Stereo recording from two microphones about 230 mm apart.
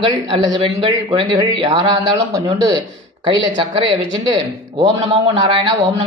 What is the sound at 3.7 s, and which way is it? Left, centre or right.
A man's voice, right.